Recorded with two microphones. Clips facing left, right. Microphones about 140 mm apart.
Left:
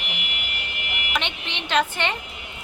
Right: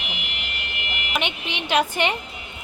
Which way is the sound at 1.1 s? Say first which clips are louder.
Right 2 dB; 10° right (ahead or behind).